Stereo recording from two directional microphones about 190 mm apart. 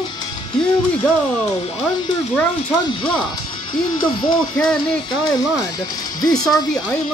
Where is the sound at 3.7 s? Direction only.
25° left (ahead or behind).